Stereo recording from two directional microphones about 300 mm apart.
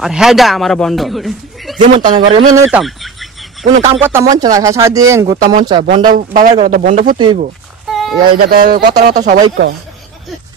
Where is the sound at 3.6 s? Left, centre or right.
Centre.